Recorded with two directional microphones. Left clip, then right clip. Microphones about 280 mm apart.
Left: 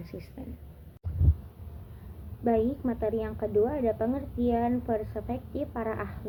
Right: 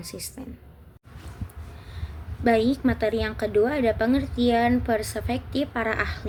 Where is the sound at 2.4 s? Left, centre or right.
Right.